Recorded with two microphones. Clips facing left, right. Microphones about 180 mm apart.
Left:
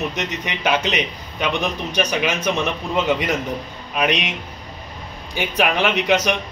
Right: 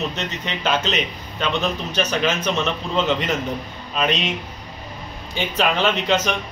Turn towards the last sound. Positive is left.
turn(degrees=10)  # may be behind; listen again after turning